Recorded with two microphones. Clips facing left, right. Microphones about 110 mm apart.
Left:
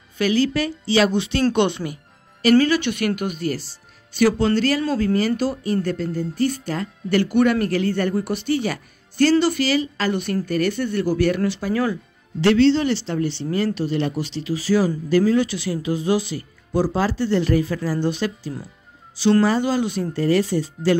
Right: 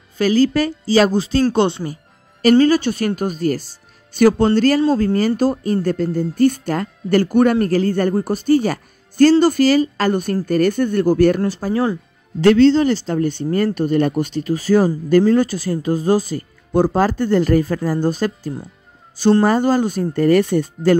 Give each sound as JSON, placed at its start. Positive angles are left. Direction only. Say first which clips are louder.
{"t": 0.2, "sound": "speech", "louder": "right 5 dB", "side_deg": -40}
{"t": 11.7, "sound": "speech", "louder": "right 4 dB", "side_deg": -30}
{"t": 12.4, "sound": "speech", "louder": "right 4 dB", "side_deg": -45}